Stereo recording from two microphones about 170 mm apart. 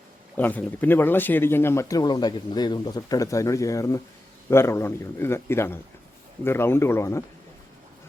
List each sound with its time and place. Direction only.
0.3 s speech: 10° left (ahead or behind)